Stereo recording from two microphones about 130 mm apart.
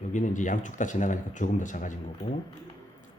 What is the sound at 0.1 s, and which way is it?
Speech, 75° left (ahead or behind).